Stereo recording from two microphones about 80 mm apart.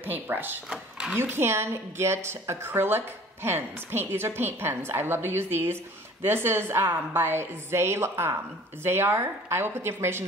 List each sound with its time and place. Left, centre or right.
0.0 s a woman's voice: right
0.7 s a sound: centre
1.1 s a woman's voice: right